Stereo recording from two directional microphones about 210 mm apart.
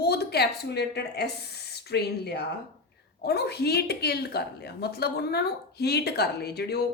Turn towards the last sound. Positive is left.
turn(degrees=50)  # may be behind; listen again after turning